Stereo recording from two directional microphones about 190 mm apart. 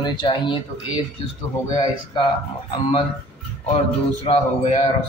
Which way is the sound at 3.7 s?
30° left (ahead or behind).